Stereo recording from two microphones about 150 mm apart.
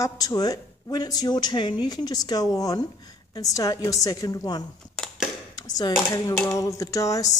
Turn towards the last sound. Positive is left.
turn(degrees=20)  # may be behind; listen again after turning